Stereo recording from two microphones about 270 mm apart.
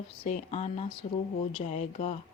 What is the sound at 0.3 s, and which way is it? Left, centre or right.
Speech, left.